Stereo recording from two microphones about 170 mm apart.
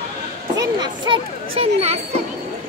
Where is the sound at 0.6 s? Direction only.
25° right (ahead or behind).